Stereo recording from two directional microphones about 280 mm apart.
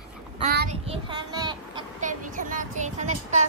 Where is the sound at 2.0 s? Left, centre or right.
Right.